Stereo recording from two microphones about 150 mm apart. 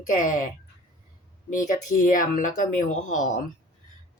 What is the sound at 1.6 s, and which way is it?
Speech, 60° left (ahead or behind).